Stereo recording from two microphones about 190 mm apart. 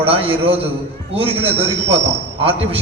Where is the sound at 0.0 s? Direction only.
30° right (ahead or behind).